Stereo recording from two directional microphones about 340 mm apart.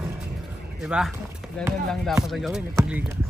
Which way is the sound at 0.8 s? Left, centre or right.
Centre.